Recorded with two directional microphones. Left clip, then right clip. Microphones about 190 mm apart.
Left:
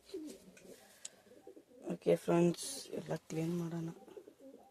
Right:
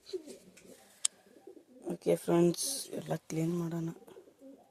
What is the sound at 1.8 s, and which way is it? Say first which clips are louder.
Speech: right 2 dB; 15° right (ahead or behind).